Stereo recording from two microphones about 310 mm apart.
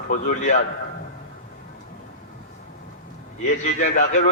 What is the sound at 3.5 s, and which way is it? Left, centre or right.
Speech, left.